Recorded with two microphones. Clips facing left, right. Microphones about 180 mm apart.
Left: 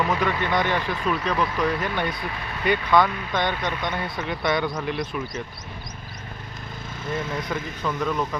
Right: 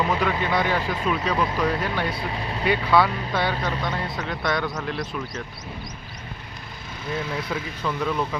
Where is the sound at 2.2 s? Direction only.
25° right (ahead or behind).